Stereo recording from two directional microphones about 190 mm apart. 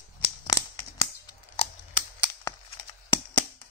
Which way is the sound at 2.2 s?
15° left (ahead or behind).